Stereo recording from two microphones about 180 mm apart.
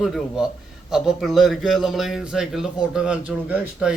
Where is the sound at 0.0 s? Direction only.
Centre (ahead or behind).